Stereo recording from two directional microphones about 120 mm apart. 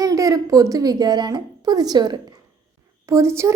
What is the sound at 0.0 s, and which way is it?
A woman's voice, 30° right (ahead or behind).